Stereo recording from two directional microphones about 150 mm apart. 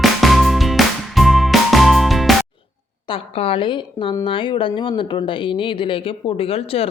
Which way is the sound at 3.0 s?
40° left (ahead or behind).